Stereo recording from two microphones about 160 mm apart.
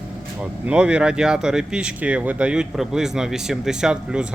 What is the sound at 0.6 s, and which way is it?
Speech, 5° right (ahead or behind).